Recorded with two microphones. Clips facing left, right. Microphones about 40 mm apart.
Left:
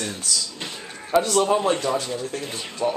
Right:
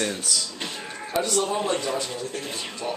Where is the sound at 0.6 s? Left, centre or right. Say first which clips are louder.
Right 1 dB; centre.